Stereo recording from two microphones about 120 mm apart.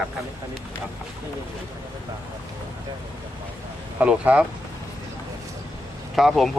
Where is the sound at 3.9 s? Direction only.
10° right (ahead or behind).